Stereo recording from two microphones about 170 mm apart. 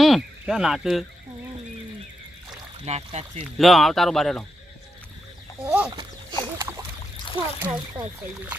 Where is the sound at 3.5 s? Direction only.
Centre (ahead or behind).